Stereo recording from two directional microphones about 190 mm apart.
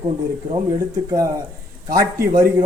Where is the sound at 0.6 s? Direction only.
20° right (ahead or behind).